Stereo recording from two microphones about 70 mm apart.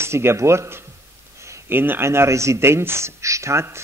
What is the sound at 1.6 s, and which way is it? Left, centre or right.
Speech, right.